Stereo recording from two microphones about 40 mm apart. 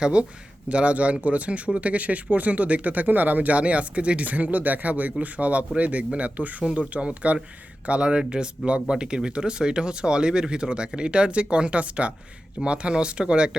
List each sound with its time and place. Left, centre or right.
0.0 s speech: right
3.6 s speech: right